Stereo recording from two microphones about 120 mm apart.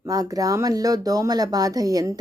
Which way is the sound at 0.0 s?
30° right (ahead or behind).